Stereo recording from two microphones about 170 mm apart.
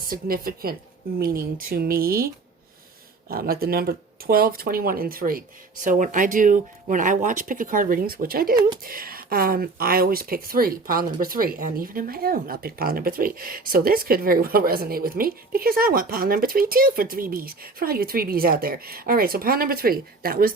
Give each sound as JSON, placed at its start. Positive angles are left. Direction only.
{"t": 0.0, "sound": "speech", "side_deg": -60}